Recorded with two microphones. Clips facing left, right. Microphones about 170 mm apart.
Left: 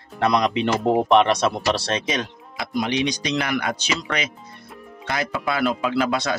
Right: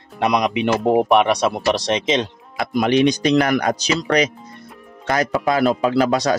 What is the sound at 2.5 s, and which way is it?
Speech, 55° right (ahead or behind).